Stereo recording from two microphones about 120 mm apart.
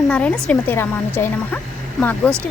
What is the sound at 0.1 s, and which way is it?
A woman's voice, 10° left (ahead or behind).